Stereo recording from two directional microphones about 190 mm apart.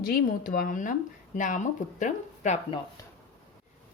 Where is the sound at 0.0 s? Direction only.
50° left (ahead or behind).